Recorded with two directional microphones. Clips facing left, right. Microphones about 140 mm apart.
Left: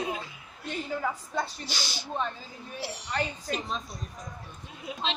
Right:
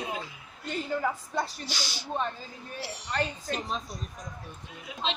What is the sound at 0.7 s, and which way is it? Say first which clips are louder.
Speech: right 2 dB; centre (ahead or behind).